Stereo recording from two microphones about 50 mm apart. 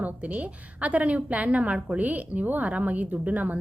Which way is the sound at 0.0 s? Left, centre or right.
Right.